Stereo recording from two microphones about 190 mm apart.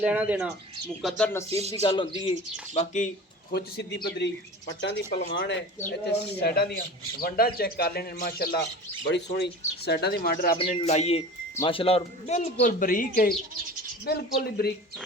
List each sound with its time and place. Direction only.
0.0 s speech: 5° right (ahead or behind)
1.0 s speech: 10° left (ahead or behind)
1.8 s speech: 25° left (ahead or behind)
2.7 s speech: 40° left (ahead or behind)
3.5 s speech: 55° left (ahead or behind)
9.0 s speech: 65° left (ahead or behind)
10.6 s speech: 35° left (ahead or behind)
14.0 s speech: 55° left (ahead or behind)